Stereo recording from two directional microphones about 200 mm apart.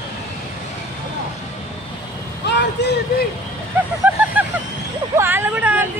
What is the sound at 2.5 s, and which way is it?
Vehicle, 60° left (ahead or behind).